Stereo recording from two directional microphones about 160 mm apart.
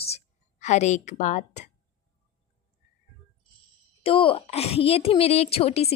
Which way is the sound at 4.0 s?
35° left (ahead or behind).